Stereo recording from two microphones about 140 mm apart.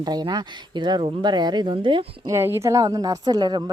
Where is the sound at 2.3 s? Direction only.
20° right (ahead or behind).